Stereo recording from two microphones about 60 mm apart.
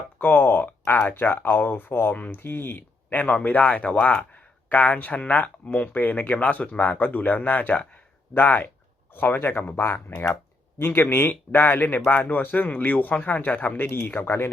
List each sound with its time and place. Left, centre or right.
0.2 s speech: left
9.8 s speech: left